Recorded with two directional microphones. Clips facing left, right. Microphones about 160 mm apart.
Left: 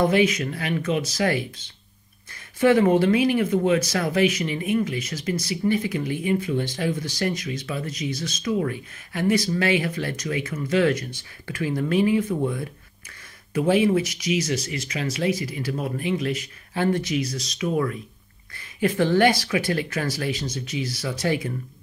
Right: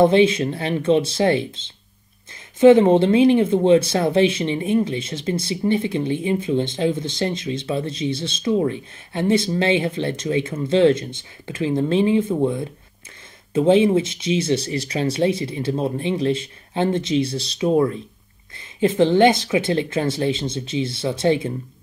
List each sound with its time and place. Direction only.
0.0 s speech: 25° right (ahead or behind)